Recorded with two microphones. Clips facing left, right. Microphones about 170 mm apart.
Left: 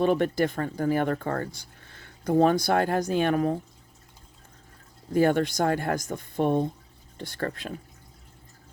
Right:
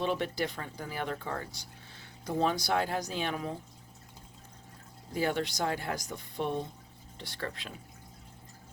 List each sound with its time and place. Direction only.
0.0 s speech: 50° left (ahead or behind)
5.1 s speech: 50° left (ahead or behind)